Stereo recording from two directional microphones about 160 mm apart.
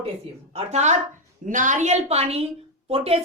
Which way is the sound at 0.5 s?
45° right (ahead or behind).